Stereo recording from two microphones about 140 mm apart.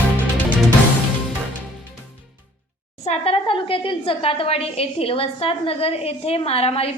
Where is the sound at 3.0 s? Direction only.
45° left (ahead or behind).